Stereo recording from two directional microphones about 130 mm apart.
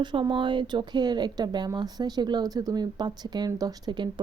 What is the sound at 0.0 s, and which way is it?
Speech, 35° right (ahead or behind).